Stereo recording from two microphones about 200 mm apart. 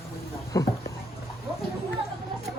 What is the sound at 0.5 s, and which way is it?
Speech, 15° left (ahead or behind).